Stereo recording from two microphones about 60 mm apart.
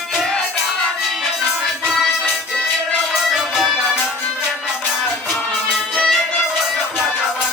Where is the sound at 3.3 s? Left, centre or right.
Centre.